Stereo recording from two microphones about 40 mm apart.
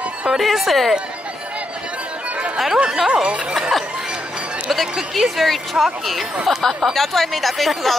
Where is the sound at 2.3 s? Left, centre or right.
Right.